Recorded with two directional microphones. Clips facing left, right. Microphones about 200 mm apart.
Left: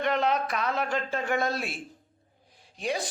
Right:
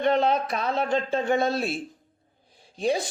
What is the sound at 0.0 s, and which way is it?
Speech, 30° right (ahead or behind).